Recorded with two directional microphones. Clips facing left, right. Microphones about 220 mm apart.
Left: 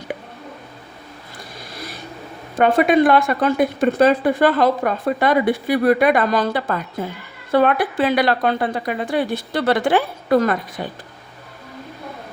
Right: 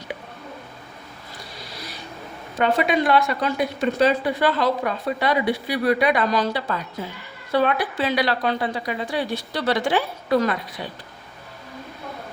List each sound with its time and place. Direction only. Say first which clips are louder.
1.7 s vehicle: left 5 dB; 50° left (ahead or behind)
2.6 s a woman's voice: left 6 dB; 50° left (ahead or behind)